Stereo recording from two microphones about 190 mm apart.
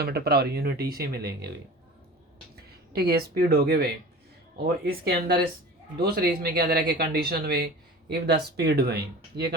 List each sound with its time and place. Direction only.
0.0 s speech: 55° right (ahead or behind)
2.6 s speech: 55° right (ahead or behind)